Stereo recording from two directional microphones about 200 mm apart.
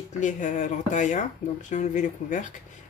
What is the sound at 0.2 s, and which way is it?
Speech, 40° left (ahead or behind).